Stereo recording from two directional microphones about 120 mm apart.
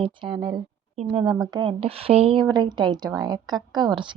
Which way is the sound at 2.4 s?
35° right (ahead or behind).